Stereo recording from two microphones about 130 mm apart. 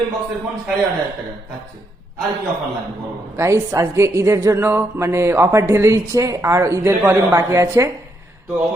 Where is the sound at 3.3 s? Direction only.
20° right (ahead or behind).